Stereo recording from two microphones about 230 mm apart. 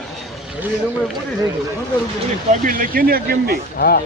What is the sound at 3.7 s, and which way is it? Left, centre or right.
Speech, left.